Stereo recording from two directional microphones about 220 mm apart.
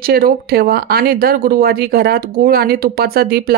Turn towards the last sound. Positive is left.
turn(degrees=-45)  # may be behind; listen again after turning